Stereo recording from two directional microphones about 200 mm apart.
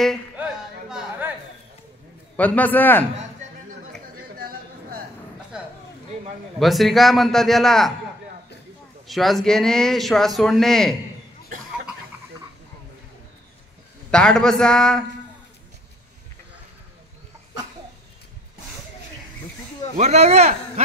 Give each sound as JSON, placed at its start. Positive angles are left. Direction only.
{"t": 0.0, "sound": "a sound", "side_deg": 0}
{"t": 2.3, "sound": "a man's voice", "side_deg": 10}
{"t": 4.4, "sound": "a sound", "side_deg": -50}
{"t": 6.6, "sound": "speech", "side_deg": 0}
{"t": 9.0, "sound": "speech", "side_deg": 0}
{"t": 14.1, "sound": "speech", "side_deg": 5}
{"t": 20.0, "sound": "a man's voice", "side_deg": -35}